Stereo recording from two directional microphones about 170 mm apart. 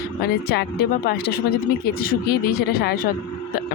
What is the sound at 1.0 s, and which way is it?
Speech, 65° left (ahead or behind).